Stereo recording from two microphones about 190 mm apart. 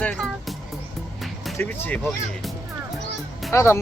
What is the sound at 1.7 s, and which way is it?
Speech, 10° left (ahead or behind).